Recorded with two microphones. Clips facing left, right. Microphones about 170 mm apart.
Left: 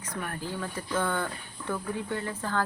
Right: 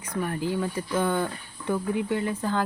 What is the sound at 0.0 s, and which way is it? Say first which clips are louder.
Speech: right 7 dB; 15° right (ahead or behind).